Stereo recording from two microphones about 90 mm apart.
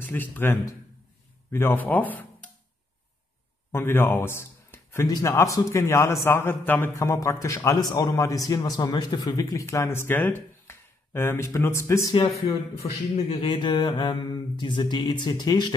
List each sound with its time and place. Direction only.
0.0 s speech: 20° left (ahead or behind)
3.7 s speech: 25° left (ahead or behind)
5.0 s a man's voice: 40° left (ahead or behind)
13.4 s mantra: 65° left (ahead or behind)